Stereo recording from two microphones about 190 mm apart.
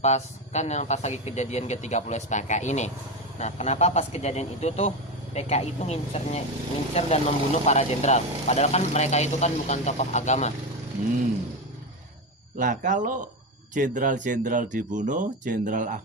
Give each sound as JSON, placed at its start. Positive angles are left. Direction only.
{"t": 0.0, "sound": "speech", "side_deg": 35}
{"t": 12.5, "sound": "speech", "side_deg": -40}